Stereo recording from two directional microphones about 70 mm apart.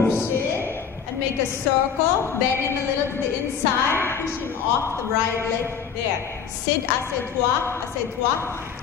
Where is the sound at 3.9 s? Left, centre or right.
Left.